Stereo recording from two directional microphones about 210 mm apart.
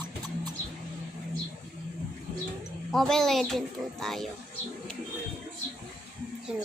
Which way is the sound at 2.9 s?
Centre (ahead or behind).